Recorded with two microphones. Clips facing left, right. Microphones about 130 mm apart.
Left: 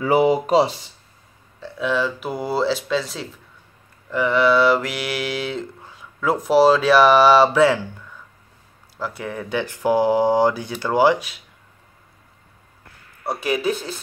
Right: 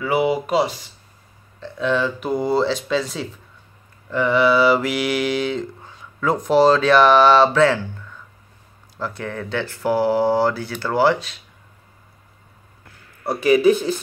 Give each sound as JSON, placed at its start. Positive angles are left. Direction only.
{"t": 0.0, "sound": "speech", "side_deg": 35}
{"t": 1.6, "sound": "mantra", "side_deg": 5}
{"t": 8.9, "sound": "speech", "side_deg": 5}